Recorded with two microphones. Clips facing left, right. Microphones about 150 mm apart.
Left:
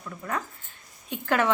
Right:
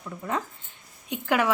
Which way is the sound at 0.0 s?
15° right (ahead or behind).